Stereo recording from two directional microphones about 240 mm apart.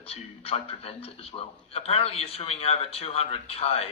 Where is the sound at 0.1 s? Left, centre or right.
Left.